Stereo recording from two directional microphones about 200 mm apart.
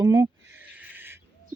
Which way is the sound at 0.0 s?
20° right (ahead or behind).